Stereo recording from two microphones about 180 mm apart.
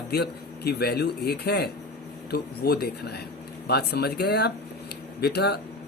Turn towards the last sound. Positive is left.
turn(degrees=65)  # may be behind; listen again after turning